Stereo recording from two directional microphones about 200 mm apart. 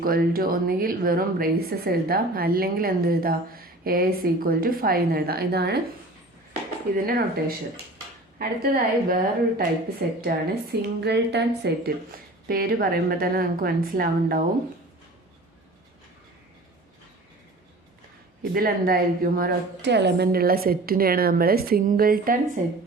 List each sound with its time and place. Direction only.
0.0 s a woman's voice: 45° right (ahead or behind)
6.9 s a woman's voice: 45° right (ahead or behind)
10.2 s a woman's voice: 50° right (ahead or behind)
18.5 s a woman's voice: 45° right (ahead or behind)